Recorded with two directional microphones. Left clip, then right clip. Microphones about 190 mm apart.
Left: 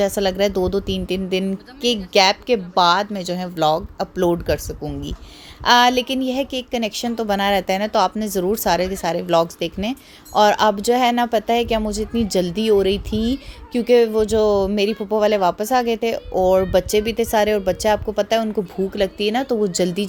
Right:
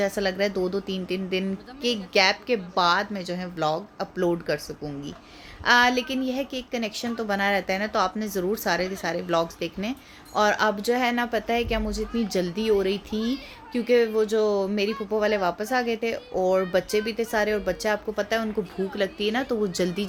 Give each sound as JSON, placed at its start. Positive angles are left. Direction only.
{"t": 0.0, "sound": "a woman's voice", "side_deg": 35}